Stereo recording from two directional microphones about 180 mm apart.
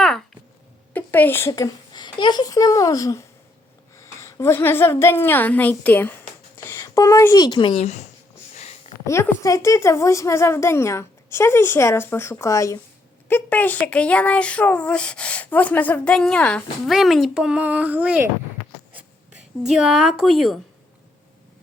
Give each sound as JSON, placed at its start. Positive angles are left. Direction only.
{"t": 0.0, "sound": "a sound", "side_deg": 0}
{"t": 0.9, "sound": "a child's voice", "side_deg": 10}
{"t": 9.0, "sound": "speech", "side_deg": 15}
{"t": 19.6, "sound": "a woman's voice", "side_deg": 0}